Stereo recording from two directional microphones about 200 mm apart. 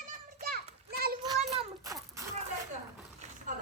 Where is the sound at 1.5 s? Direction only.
20° right (ahead or behind).